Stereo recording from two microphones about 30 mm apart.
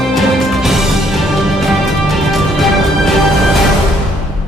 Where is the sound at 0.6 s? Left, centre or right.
Centre.